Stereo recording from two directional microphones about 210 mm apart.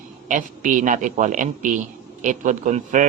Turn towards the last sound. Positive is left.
turn(degrees=-40)  # may be behind; listen again after turning